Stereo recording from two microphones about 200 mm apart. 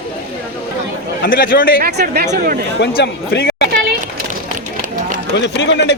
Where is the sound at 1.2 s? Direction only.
45° left (ahead or behind).